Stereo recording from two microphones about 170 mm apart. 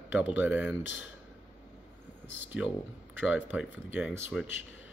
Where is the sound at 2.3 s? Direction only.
90° left.